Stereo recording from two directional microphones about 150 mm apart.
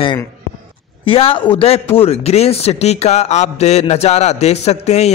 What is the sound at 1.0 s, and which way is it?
A man's voice, 35° left (ahead or behind).